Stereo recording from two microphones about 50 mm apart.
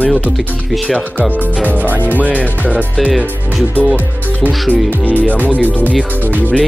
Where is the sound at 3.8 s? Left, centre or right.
Right.